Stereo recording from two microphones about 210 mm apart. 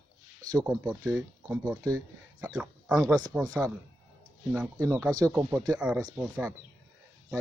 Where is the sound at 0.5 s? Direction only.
20° right (ahead or behind).